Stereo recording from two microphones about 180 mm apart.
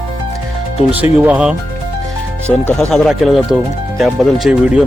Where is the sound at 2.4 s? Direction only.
5° left (ahead or behind).